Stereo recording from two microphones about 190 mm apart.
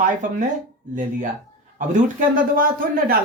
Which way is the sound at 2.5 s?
50° right (ahead or behind).